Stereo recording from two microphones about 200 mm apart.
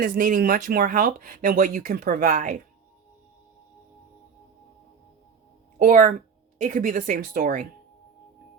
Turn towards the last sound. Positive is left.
turn(degrees=-45)  # may be behind; listen again after turning